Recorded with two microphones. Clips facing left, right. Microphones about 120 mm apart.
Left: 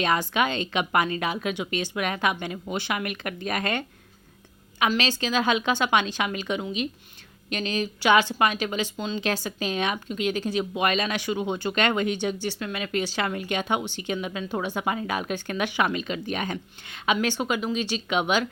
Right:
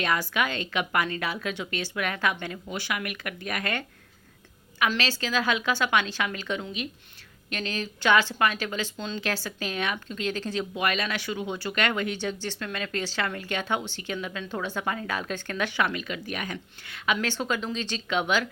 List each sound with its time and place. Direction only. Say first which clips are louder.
0.0 s a woman's voice: left 3 dB; 25° left (ahead or behind)
4.9 s a woman's voice: left 5 dB; 20° left (ahead or behind)